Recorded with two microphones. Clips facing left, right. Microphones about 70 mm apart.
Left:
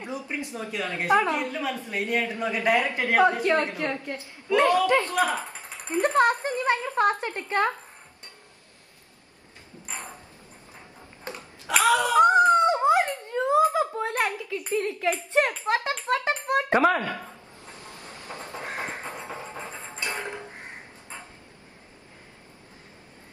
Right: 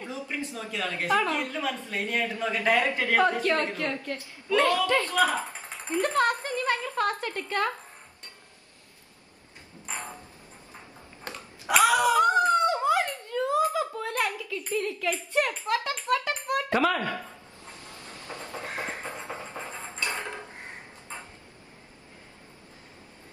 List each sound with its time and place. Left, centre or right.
0.0 s a woman's voice: left
12.2 s speech: left
17.8 s a sound: left
19.2 s music: left